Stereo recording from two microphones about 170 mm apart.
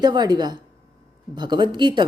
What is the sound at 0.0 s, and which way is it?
A woman's voice, 25° right (ahead or behind).